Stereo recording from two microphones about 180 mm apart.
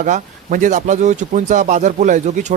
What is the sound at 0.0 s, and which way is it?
Speech, 45° right (ahead or behind).